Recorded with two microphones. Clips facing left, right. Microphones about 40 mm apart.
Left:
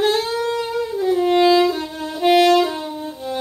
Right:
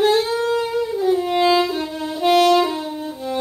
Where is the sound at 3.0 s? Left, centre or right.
Centre.